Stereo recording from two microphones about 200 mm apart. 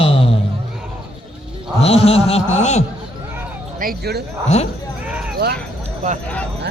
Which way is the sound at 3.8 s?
50° right (ahead or behind).